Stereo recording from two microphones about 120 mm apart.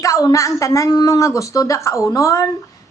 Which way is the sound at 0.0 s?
30° left (ahead or behind).